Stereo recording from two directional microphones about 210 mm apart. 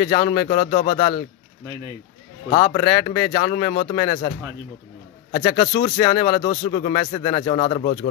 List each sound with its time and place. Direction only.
0.0 s speech: 30° left (ahead or behind)
2.5 s speech: 30° left (ahead or behind)
5.3 s speech: 30° left (ahead or behind)